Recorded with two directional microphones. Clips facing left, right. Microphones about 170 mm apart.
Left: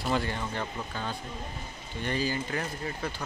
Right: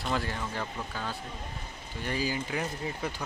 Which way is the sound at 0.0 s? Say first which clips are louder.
Left 2 dB; centre (ahead or behind).